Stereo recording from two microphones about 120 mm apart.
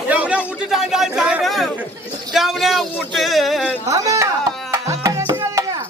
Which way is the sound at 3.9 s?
25° right (ahead or behind).